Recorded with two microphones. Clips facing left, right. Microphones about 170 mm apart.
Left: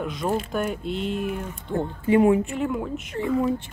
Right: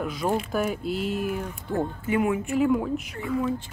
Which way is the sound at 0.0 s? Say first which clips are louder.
Even; 5° right (ahead or behind).